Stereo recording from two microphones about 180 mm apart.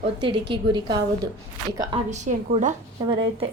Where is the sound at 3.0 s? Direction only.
25° right (ahead or behind).